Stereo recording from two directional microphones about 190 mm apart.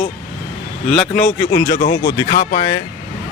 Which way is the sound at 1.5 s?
60° left (ahead or behind).